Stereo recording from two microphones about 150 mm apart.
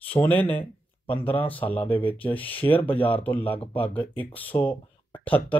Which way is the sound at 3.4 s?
35° left (ahead or behind).